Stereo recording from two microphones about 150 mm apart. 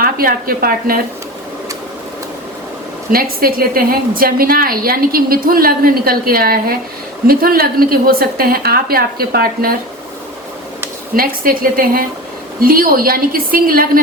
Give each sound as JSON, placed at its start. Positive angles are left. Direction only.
{"t": 0.0, "sound": "a woman's voice", "side_deg": -80}
{"t": 3.1, "sound": "a woman's voice", "side_deg": -80}
{"t": 11.1, "sound": "a woman's voice", "side_deg": -70}